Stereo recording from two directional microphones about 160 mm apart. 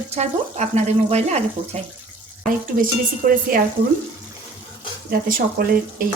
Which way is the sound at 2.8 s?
60° right (ahead or behind).